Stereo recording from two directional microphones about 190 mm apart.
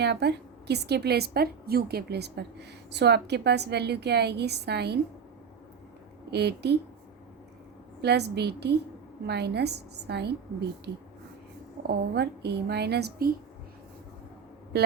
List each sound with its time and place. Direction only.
0.0 s a woman's voice: 60° right (ahead or behind)
6.3 s a woman's voice: 60° right (ahead or behind)
8.0 s a woman's voice: 60° right (ahead or behind)
11.8 s a woman's voice: 60° right (ahead or behind)